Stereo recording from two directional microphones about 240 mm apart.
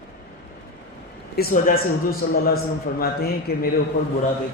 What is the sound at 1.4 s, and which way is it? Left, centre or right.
A man's voice, left.